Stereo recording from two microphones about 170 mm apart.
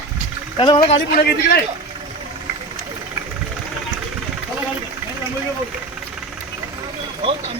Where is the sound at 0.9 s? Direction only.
65° left (ahead or behind).